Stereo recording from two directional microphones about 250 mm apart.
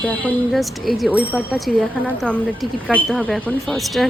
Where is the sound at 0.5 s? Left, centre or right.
Centre.